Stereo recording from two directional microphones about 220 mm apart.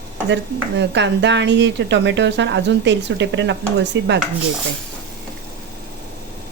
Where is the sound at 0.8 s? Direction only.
55° right (ahead or behind).